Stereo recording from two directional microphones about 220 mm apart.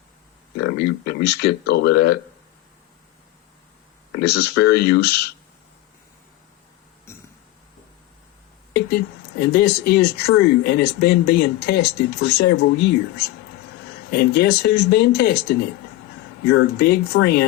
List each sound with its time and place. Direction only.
0.6 s speech: 50° left (ahead or behind)
4.1 s speech: 50° left (ahead or behind)
8.7 s speech: 45° left (ahead or behind)